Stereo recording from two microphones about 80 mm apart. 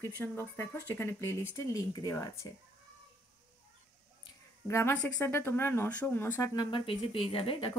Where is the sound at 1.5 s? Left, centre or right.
Left.